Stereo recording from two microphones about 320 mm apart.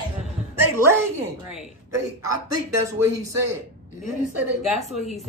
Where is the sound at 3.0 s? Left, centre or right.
Right.